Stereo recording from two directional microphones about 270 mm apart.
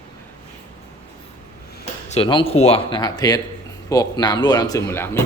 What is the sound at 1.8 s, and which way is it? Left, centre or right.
Speech, left.